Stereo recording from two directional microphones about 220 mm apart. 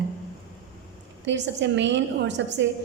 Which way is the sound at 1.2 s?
55° right (ahead or behind).